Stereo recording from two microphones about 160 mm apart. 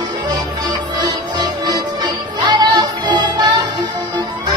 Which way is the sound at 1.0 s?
25° right (ahead or behind).